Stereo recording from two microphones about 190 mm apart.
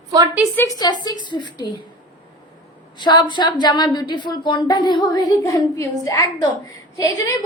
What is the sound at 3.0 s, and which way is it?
A woman's voice, 25° left (ahead or behind).